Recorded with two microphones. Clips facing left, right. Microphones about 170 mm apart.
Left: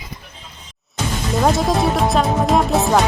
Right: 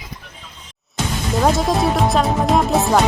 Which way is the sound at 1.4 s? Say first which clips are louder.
Even; centre (ahead or behind).